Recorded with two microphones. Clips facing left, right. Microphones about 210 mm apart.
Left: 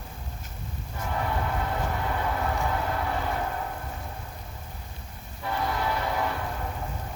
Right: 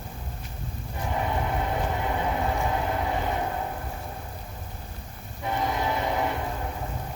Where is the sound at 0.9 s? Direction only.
20° right (ahead or behind).